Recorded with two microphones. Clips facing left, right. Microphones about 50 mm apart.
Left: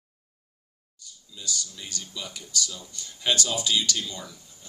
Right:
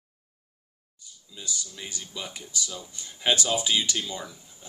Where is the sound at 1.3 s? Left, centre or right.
Centre.